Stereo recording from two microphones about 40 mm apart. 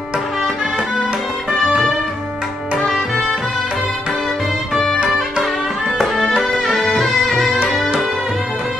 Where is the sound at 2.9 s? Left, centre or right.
Centre.